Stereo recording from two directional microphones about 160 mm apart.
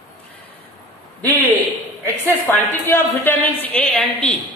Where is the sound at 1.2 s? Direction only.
10° left (ahead or behind).